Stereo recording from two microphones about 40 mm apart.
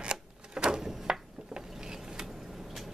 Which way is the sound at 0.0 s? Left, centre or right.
Right.